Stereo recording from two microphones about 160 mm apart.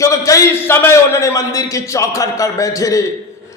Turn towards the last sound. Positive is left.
turn(degrees=20)  # may be behind; listen again after turning